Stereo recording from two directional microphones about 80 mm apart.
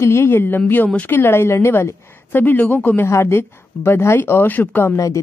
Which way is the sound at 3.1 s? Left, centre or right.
Left.